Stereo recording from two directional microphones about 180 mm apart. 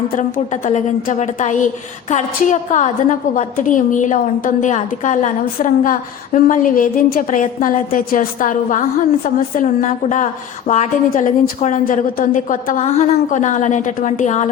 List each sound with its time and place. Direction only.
0.2 s a woman's voice: 45° left (ahead or behind)